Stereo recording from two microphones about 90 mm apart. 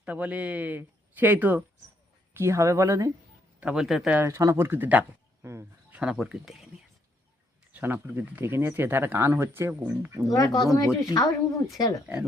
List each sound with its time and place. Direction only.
0.0 s speech: 15° right (ahead or behind)
2.3 s a woman's voice: 30° right (ahead or behind)
3.6 s a man's voice: 10° right (ahead or behind)
4.3 s speech: 35° right (ahead or behind); by 6.5 s 10° right (ahead or behind)
7.7 s speech: 20° right (ahead or behind)
10.2 s speech: 40° left (ahead or behind)